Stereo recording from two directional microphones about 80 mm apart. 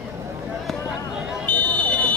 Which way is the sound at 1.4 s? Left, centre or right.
Centre.